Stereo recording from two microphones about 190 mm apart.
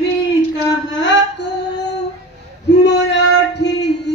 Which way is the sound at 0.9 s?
70° left (ahead or behind).